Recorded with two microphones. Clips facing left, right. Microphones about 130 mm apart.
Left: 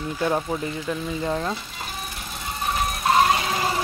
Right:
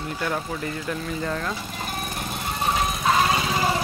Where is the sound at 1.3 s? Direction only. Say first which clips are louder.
Left 2 dB; 25° left (ahead or behind).